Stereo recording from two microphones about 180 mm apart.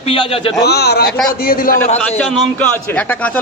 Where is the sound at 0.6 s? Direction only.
65° left (ahead or behind).